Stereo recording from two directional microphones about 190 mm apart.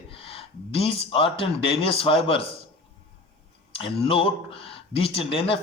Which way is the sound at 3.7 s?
30° left (ahead or behind).